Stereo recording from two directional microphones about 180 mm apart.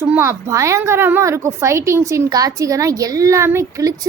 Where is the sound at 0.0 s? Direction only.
10° right (ahead or behind).